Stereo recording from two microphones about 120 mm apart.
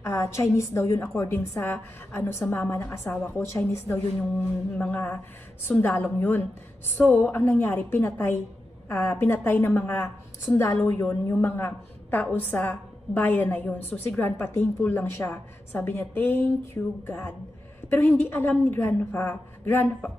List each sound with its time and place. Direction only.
0.0 s a woman's voice: 25° left (ahead or behind)